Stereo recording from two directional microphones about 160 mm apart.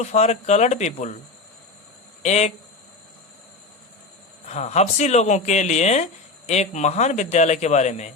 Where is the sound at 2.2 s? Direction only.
45° left (ahead or behind).